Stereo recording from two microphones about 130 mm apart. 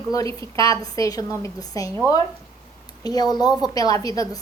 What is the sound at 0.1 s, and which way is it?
A woman's voice, 25° left (ahead or behind).